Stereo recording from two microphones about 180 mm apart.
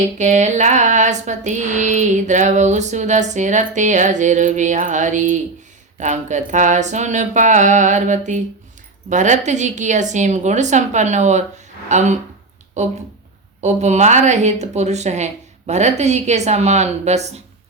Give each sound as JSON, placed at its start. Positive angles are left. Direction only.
{"t": 0.2, "sound": "a woman's voice", "side_deg": -40}